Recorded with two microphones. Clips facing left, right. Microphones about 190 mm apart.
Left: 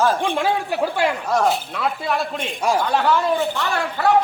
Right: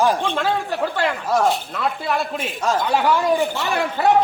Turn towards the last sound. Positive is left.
turn(degrees=-20)  # may be behind; listen again after turning